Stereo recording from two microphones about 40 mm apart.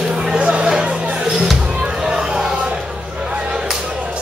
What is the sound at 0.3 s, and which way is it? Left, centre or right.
Music, right.